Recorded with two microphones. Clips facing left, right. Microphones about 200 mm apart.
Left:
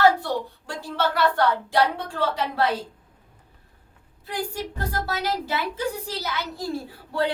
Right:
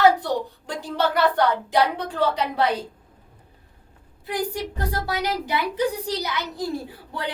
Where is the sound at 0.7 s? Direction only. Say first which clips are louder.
Right 2 dB; 15° right (ahead or behind).